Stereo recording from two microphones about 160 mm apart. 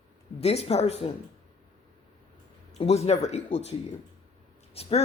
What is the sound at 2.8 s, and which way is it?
Speech, 40° left (ahead or behind).